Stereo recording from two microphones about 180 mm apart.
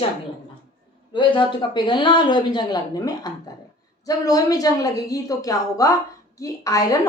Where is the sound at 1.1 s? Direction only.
25° left (ahead or behind).